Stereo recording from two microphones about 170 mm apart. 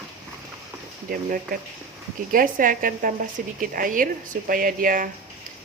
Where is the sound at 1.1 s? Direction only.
60° right (ahead or behind).